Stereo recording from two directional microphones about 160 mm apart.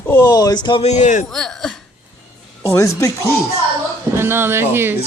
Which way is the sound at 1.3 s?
5° left (ahead or behind).